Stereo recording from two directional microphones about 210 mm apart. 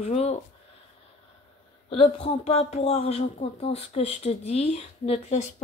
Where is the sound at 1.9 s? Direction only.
25° left (ahead or behind).